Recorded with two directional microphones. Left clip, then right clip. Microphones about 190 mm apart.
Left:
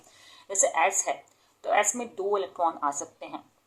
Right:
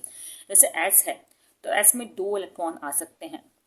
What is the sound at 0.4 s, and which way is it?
Speech, 45° right (ahead or behind).